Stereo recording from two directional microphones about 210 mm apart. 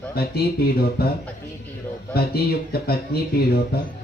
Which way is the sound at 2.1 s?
50° left (ahead or behind).